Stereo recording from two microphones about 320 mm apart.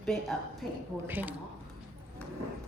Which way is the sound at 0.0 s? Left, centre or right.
Centre.